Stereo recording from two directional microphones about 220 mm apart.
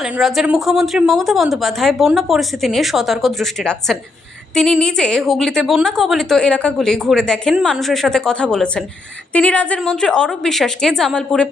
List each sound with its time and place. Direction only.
0.0 s a woman's voice: centre (ahead or behind)